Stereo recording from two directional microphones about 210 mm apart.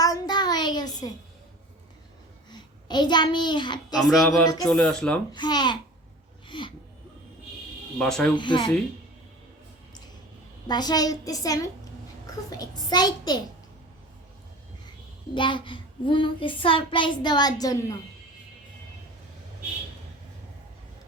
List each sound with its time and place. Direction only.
0.0 s a sound: 20° left (ahead or behind)
2.5 s a child's voice: 20° left (ahead or behind)
3.9 s speech: centre (ahead or behind)
5.3 s a child's voice: 20° left (ahead or behind)
7.9 s speech: 5° left (ahead or behind)
8.4 s a child's voice: 20° left (ahead or behind)
10.7 s a woman's voice: 20° left (ahead or behind)
15.4 s a child's voice: 25° left (ahead or behind)